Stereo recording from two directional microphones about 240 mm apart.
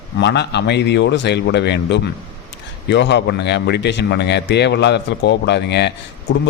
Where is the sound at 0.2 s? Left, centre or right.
Left.